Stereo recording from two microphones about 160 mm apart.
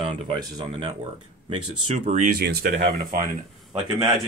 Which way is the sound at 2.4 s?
85° right.